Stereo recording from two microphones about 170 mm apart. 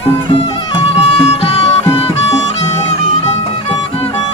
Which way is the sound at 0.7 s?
35° left (ahead or behind).